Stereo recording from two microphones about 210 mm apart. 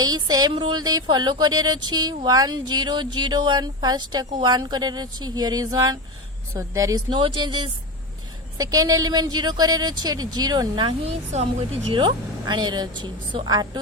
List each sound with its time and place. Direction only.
0.0 s a woman's voice: 20° right (ahead or behind)
11.3 s speech: 35° right (ahead or behind)
11.9 s speech: 20° right (ahead or behind)